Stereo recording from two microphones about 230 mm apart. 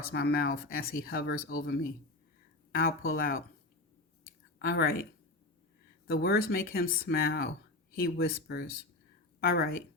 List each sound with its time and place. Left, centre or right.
0.0 s speech: left
4.7 s speech: left
6.1 s speech: left